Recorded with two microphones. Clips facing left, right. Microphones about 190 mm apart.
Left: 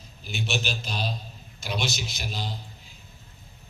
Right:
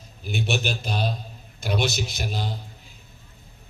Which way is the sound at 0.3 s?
55° right (ahead or behind).